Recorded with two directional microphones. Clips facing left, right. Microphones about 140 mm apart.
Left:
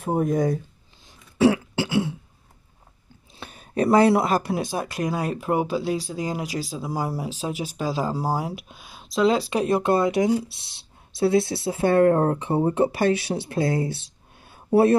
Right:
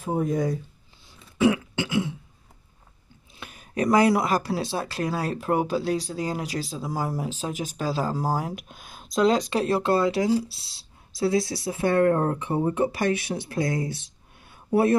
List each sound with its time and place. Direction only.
0.0 s speech: 55° left (ahead or behind)
1.4 s throat clearing: 35° left (ahead or behind)
3.3 s speech: 30° left (ahead or behind)